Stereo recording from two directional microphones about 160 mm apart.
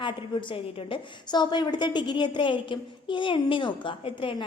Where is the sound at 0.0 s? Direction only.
30° left (ahead or behind).